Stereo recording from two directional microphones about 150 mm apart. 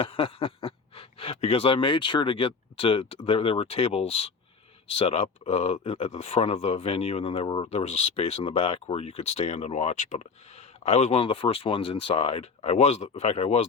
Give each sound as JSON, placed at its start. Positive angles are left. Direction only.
{"t": 0.0, "sound": "speech", "side_deg": 35}